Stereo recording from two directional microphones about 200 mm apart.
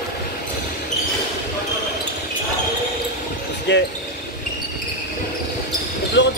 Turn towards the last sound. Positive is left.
turn(degrees=60)  # may be behind; listen again after turning